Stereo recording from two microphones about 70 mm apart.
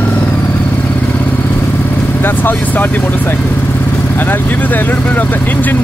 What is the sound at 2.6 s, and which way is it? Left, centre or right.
Speech, left.